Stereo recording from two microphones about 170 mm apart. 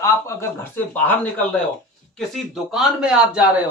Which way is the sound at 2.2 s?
Centre (ahead or behind).